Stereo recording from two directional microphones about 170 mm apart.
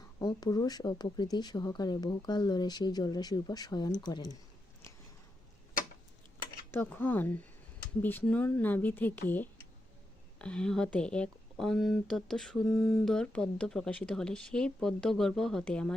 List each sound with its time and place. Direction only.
0.2 s speech: 25° left (ahead or behind)
6.7 s speech: 10° left (ahead or behind)
10.3 s speech: 5° left (ahead or behind)
12.6 s speech: 20° left (ahead or behind)
13.1 s speech: 5° left (ahead or behind)